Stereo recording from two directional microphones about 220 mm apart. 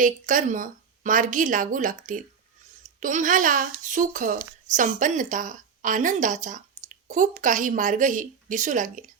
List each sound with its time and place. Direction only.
0.0 s a woman's voice: 35° right (ahead or behind)